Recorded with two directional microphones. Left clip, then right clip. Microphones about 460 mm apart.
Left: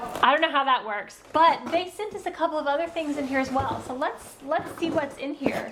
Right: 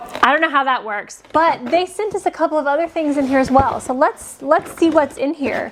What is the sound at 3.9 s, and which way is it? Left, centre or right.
A woman's voice, right.